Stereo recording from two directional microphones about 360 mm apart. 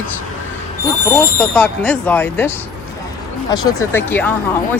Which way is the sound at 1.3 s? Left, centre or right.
Centre.